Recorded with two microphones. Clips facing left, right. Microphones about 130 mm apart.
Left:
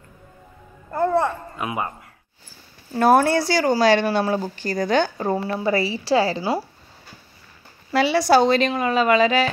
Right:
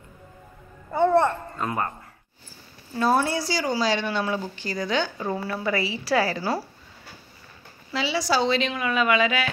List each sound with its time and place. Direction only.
0.8 s a child's voice: centre (ahead or behind)
3.0 s speech: 60° left (ahead or behind)
4.0 s a woman's voice: 40° left (ahead or behind)
5.3 s a woman's voice: 25° left (ahead or behind)
7.9 s a woman's voice: 55° left (ahead or behind); by 9.5 s 35° left (ahead or behind)